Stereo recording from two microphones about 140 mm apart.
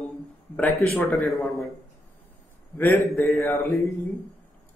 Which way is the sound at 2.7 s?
10° left (ahead or behind).